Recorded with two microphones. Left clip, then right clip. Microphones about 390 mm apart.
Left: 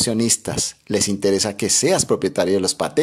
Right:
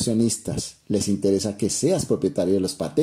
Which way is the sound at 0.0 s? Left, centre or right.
Centre.